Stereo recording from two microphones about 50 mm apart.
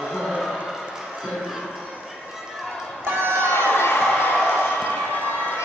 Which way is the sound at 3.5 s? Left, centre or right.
Left.